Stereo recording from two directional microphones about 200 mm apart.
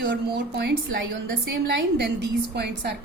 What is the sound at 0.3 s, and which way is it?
A woman's voice, 55° right (ahead or behind).